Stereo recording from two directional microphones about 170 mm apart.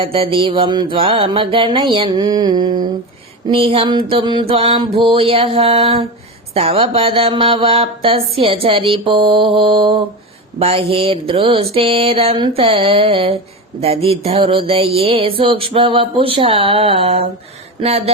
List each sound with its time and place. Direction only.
0.0 s mantra: 35° right (ahead or behind)
3.4 s speech: 30° right (ahead or behind)